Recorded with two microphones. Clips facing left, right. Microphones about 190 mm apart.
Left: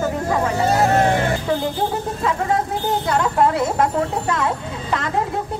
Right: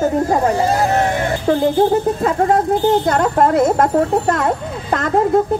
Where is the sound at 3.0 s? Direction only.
45° right (ahead or behind).